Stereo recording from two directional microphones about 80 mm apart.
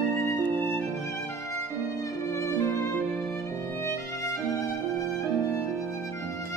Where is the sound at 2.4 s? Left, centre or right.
Left.